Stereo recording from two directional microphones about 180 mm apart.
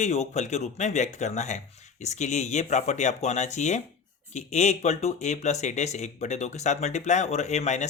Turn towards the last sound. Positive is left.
turn(degrees=40)  # may be behind; listen again after turning